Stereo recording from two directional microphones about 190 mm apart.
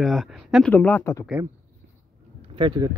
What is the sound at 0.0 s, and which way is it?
Speech, centre (ahead or behind).